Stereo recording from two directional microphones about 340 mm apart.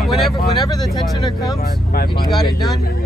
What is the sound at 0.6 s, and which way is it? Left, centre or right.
Speech, centre.